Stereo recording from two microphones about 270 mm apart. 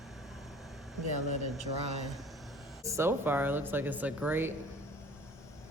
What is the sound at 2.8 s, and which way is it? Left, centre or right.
Speech, centre.